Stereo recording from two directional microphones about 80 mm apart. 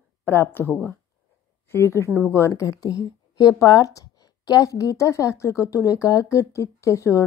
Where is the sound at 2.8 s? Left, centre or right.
Left.